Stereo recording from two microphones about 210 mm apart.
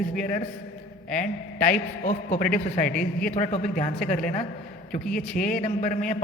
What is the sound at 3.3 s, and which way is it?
A man's voice, 30° left (ahead or behind).